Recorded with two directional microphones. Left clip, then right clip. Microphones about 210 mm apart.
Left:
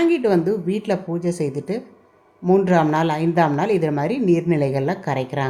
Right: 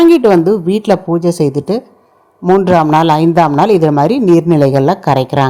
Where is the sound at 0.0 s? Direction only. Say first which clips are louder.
Right 11 dB; 35° right (ahead or behind).